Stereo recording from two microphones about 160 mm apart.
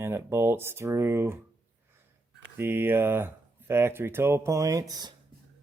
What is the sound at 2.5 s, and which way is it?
Speech, 15° right (ahead or behind).